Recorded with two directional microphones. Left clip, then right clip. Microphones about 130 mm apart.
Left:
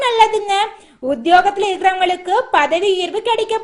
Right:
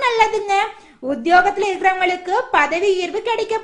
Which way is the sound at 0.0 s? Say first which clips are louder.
Left 3 dB; 45° left (ahead or behind).